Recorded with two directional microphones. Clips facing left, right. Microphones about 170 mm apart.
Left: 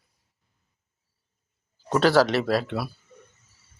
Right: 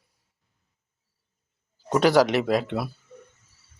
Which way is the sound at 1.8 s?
15° right (ahead or behind).